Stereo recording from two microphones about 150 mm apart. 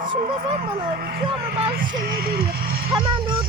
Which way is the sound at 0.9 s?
90° right.